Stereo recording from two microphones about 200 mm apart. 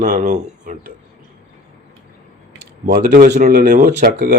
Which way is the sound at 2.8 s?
45° right (ahead or behind).